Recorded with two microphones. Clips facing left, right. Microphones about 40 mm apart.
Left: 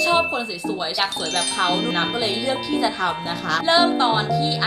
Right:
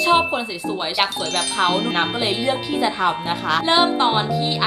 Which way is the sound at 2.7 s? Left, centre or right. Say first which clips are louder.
Right 1 dB; centre.